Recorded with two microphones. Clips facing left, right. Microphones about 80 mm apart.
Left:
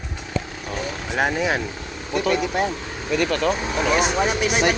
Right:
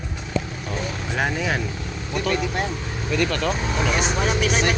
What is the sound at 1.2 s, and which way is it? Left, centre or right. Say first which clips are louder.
Speech: left 3 dB; centre.